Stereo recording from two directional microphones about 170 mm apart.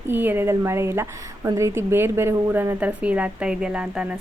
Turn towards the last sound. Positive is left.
turn(degrees=-5)  # may be behind; listen again after turning